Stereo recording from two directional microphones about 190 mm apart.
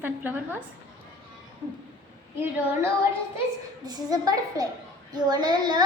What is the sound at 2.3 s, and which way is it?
Speech, 10° right (ahead or behind).